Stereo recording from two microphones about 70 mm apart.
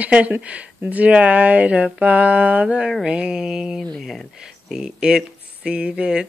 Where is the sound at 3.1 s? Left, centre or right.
Centre.